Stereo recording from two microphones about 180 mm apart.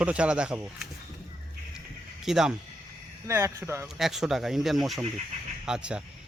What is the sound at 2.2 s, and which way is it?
Speech, 5° right (ahead or behind).